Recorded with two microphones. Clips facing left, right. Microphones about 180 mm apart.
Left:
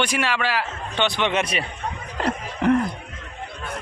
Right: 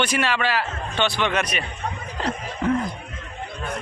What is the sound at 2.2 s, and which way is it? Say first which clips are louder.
Chuckle: left 3 dB; 70° left (ahead or behind).